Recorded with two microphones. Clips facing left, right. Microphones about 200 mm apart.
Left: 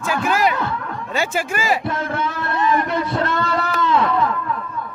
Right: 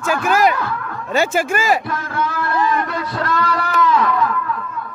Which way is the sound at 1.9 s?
25° left (ahead or behind).